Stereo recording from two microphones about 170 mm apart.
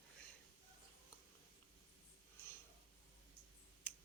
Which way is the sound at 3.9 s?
5° left (ahead or behind).